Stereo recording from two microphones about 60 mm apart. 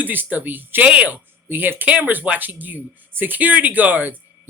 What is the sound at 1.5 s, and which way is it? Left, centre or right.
A woman's voice, right.